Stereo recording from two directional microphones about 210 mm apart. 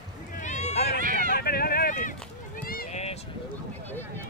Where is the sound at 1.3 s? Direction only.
45° left (ahead or behind).